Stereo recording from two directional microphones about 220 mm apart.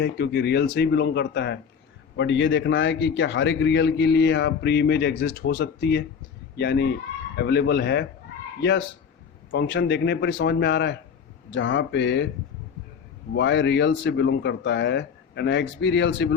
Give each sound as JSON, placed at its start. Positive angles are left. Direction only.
{"t": 0.0, "sound": "a man's voice", "side_deg": 50}
{"t": 9.5, "sound": "a man's voice", "side_deg": 55}
{"t": 13.3, "sound": "a man's voice", "side_deg": 55}